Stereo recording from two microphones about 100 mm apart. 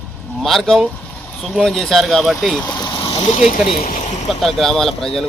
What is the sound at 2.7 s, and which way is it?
Speech, 50° left (ahead or behind).